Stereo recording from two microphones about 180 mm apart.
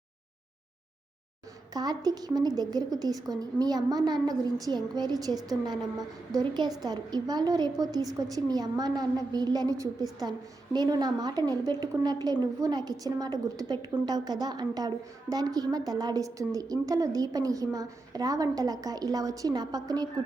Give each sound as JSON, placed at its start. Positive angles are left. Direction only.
{"t": 1.7, "sound": "a woman's voice", "side_deg": -20}